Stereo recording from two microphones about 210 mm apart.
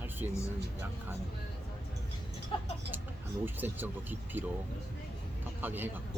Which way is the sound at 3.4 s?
10° right (ahead or behind).